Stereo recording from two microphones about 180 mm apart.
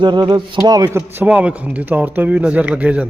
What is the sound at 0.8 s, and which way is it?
A man's voice, 10° right (ahead or behind).